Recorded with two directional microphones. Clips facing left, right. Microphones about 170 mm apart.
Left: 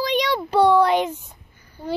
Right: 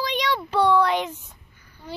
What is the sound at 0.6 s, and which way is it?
Speech, 35° left (ahead or behind).